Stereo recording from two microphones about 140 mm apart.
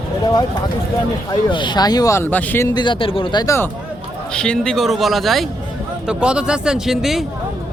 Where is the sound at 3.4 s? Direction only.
20° left (ahead or behind).